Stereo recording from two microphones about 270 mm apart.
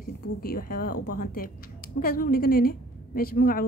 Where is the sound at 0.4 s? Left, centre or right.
Left.